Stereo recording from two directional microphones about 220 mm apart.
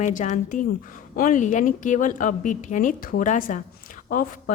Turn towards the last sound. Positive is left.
turn(degrees=35)  # may be behind; listen again after turning